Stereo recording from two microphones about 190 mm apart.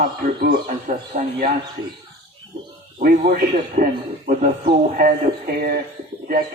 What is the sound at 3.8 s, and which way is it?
A man's voice, 45° right (ahead or behind).